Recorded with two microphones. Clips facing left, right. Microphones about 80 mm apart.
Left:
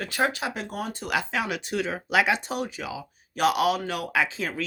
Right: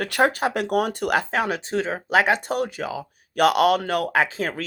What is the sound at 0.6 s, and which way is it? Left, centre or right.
Speech, right.